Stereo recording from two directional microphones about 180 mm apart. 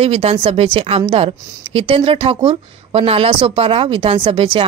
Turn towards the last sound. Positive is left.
turn(degrees=-30)  # may be behind; listen again after turning